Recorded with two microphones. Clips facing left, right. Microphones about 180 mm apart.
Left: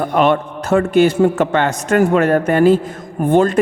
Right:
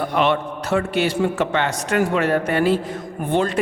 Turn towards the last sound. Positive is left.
turn(degrees=50)  # may be behind; listen again after turning